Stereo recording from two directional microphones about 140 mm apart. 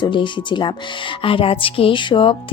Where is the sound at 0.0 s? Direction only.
35° left (ahead or behind).